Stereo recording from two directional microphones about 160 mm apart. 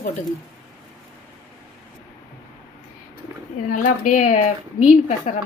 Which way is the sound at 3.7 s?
55° left (ahead or behind).